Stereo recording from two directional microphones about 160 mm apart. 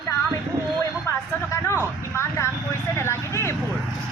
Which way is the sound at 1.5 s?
15° left (ahead or behind).